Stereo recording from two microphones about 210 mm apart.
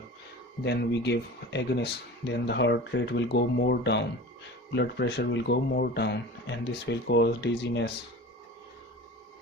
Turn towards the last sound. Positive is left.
turn(degrees=55)  # may be behind; listen again after turning